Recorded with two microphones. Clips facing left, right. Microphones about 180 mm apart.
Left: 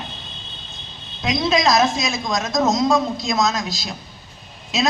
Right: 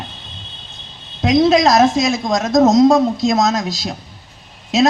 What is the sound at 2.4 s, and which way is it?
Speech, 45° right (ahead or behind).